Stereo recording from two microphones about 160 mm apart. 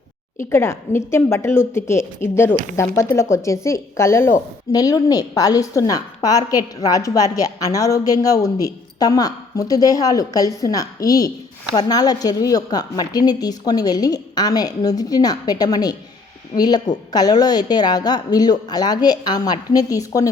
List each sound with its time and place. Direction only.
0.5 s a woman's voice: 15° left (ahead or behind)